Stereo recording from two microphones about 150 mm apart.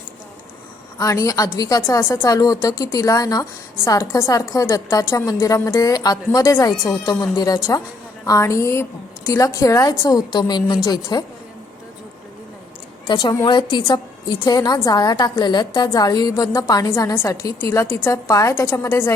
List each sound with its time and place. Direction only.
0.9 s a woman's voice: 20° left (ahead or behind)
13.1 s a woman's voice: 30° left (ahead or behind)